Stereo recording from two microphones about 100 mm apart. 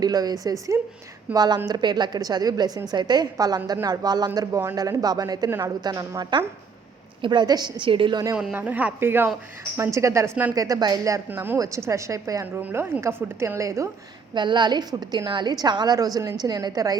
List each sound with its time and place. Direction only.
0.0 s a woman's voice: 40° right (ahead or behind)
0.7 s a woman's voice: 30° right (ahead or behind)
1.3 s a woman's voice: 40° right (ahead or behind); by 8.2 s 60° right (ahead or behind)
8.5 s a woman's voice: 15° right (ahead or behind); by 11.2 s 35° right (ahead or behind)
11.3 s a woman's voice: 20° right (ahead or behind)
12.5 s a woman's voice: 20° right (ahead or behind)
14.3 s a woman's voice: 50° right (ahead or behind)